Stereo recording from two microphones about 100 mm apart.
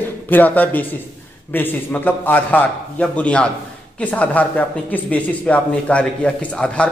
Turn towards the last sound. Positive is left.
turn(degrees=10)  # may be behind; listen again after turning